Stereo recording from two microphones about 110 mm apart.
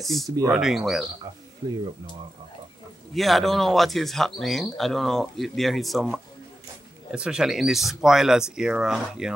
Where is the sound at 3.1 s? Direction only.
Centre (ahead or behind).